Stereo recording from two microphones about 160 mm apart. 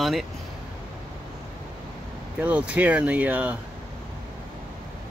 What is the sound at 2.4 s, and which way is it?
Speech, 10° right (ahead or behind).